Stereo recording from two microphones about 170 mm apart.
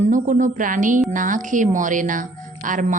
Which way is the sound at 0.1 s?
50° right (ahead or behind).